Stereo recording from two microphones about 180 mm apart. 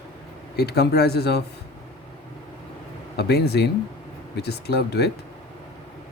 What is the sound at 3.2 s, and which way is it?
Speech, 65° left (ahead or behind).